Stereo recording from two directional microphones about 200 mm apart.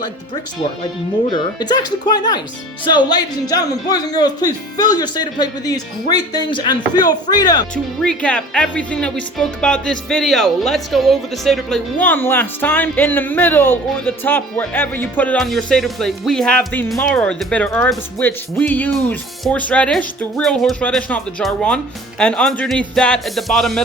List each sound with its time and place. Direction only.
1.3 s speech: 20° left (ahead or behind)
8.0 s speech: 5° left (ahead or behind)